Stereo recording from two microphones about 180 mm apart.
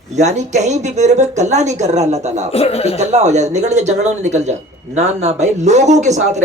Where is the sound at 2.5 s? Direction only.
35° left (ahead or behind).